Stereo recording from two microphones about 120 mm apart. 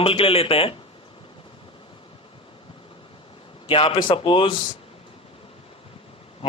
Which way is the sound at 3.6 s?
50° left (ahead or behind).